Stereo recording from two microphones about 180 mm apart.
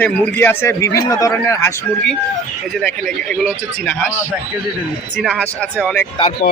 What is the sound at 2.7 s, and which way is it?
Speech, 5° left (ahead or behind).